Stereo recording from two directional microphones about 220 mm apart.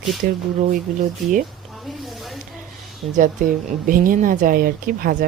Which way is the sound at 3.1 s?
40° right (ahead or behind).